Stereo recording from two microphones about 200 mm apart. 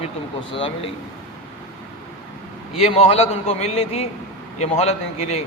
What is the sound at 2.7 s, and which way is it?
A man's voice, 30° left (ahead or behind).